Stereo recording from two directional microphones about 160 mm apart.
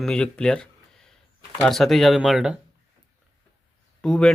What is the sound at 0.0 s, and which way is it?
Speech, 5° left (ahead or behind).